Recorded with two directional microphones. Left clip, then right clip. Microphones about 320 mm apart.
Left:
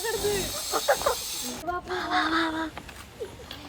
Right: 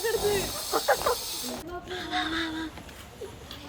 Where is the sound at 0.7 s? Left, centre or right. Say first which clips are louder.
Even; centre.